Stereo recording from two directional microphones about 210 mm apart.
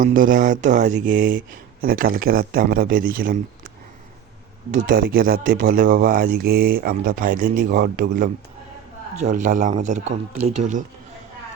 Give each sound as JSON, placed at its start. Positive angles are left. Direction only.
{"t": 0.0, "sound": "speech", "side_deg": -40}
{"t": 4.7, "sound": "speech", "side_deg": -40}